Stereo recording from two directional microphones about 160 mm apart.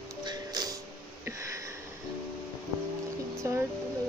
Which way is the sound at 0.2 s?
25° right (ahead or behind).